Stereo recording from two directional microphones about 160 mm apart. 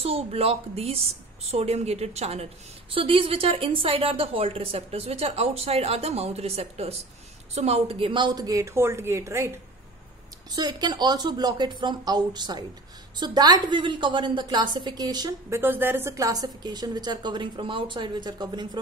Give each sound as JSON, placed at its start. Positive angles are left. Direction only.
{"t": 0.0, "sound": "a woman's voice", "side_deg": -40}
{"t": 10.5, "sound": "a woman's voice", "side_deg": -25}